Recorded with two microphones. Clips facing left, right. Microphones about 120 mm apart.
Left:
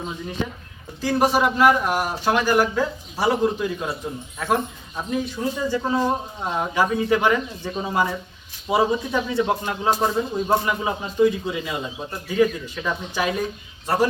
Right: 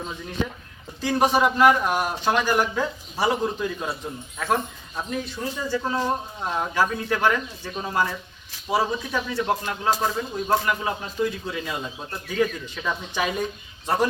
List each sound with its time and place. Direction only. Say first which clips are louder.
1.0 s a man's voice: left 1 dB; 5° left (ahead or behind)